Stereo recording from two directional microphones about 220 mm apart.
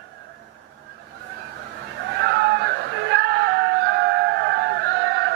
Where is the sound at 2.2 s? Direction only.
50° right (ahead or behind).